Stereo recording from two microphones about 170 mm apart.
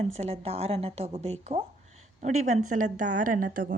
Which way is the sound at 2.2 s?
45° right (ahead or behind).